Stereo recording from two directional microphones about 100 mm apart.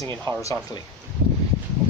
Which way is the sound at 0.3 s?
50° right (ahead or behind).